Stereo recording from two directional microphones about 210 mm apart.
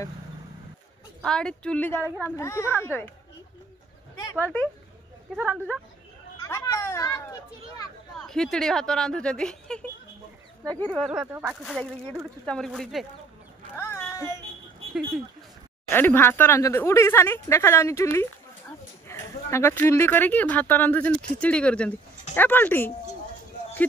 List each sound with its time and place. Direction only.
1.2 s speech: 5° left (ahead or behind)
4.2 s a sound: 15° left (ahead or behind)
5.3 s speech: 5° right (ahead or behind)
6.4 s speech: 15° left (ahead or behind)
8.2 s speech: 5° left (ahead or behind)
11.6 s speech: 5° left (ahead or behind)
13.7 s a sound: 10° left (ahead or behind)
15.9 s speech: 10° left (ahead or behind)